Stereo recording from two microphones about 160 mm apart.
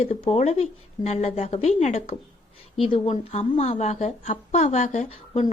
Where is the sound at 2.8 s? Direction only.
35° left (ahead or behind).